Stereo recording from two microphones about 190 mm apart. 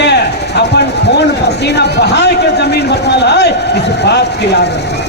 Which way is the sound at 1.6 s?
60° left (ahead or behind).